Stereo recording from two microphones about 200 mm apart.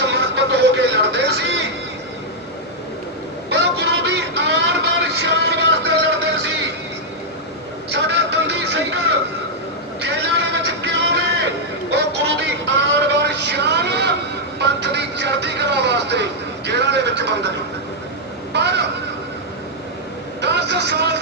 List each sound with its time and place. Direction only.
0.0 s music: 60° right (ahead or behind)
3.5 s a sound: 60° right (ahead or behind)
6.0 s music: 60° right (ahead or behind)
7.9 s vehicle: 60° right (ahead or behind)
10.0 s vehicle: 60° right (ahead or behind)
14.6 s music: 60° right (ahead or behind)
16.6 s vehicle: 60° right (ahead or behind)
18.5 s a sound: 60° right (ahead or behind)
20.4 s vehicle: 55° right (ahead or behind)